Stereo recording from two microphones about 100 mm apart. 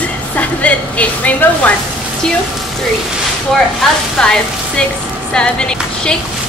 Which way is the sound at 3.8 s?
5° left (ahead or behind).